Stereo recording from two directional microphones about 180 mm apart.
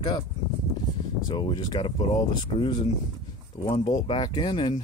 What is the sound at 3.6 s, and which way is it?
Speech, 25° left (ahead or behind).